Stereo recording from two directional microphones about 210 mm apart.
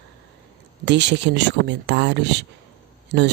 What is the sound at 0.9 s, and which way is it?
Speech, 55° right (ahead or behind).